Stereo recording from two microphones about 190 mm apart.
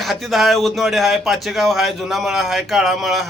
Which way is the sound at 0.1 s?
Centre (ahead or behind).